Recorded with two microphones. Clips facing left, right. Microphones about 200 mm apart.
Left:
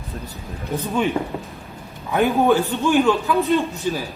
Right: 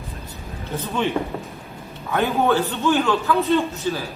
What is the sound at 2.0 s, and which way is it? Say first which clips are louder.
A man's voice: left 3 dB; 15° left (ahead or behind).